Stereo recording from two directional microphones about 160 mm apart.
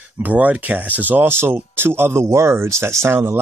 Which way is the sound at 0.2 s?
10° right (ahead or behind).